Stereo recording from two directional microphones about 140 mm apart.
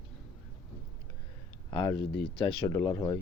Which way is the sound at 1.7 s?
35° left (ahead or behind).